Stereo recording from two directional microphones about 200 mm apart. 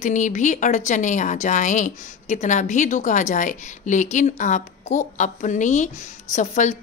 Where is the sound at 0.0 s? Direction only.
35° left (ahead or behind).